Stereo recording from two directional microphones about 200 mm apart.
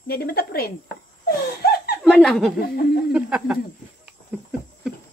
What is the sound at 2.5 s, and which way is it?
Speech, 50° left (ahead or behind).